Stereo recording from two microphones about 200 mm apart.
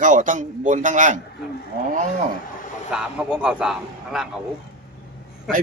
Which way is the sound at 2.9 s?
5° right (ahead or behind).